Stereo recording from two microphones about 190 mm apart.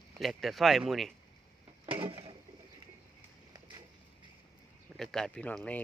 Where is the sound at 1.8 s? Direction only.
25° right (ahead or behind).